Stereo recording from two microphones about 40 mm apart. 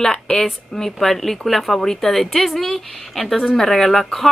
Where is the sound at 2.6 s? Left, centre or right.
Centre.